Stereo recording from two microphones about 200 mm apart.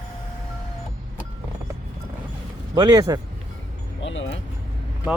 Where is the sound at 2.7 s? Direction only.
20° right (ahead or behind).